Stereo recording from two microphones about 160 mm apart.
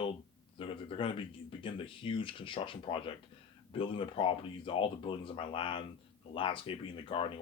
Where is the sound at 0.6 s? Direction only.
35° left (ahead or behind).